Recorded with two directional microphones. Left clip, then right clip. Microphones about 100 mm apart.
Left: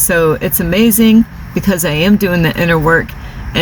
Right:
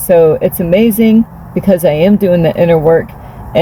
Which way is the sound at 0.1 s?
20° right (ahead or behind).